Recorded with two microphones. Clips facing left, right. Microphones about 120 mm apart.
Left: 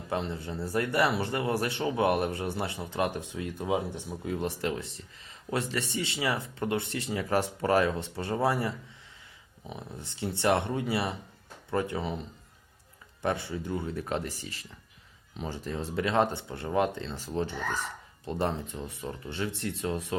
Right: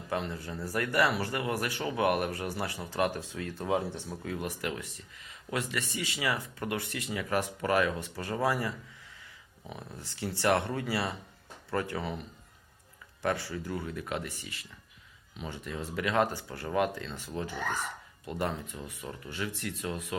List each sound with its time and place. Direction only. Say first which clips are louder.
0.1 s speech: left 2 dB; 25° left (ahead or behind)
13.2 s speech: left 1 dB; 20° left (ahead or behind)